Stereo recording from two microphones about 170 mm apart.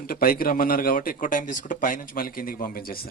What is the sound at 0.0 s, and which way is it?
A man's voice, 60° left (ahead or behind).